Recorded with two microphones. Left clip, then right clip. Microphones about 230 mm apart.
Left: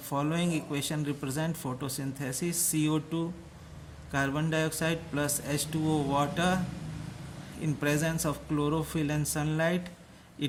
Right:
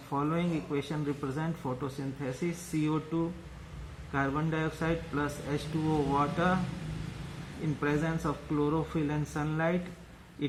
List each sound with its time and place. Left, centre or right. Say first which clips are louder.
0.1 s a man's voice: left 1 dB; left
7.8 s a man's voice: left 2 dB; left